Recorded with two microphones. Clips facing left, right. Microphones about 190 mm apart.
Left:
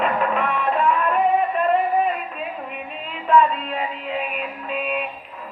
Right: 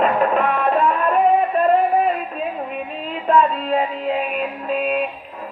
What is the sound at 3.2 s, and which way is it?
Music, 40° right (ahead or behind).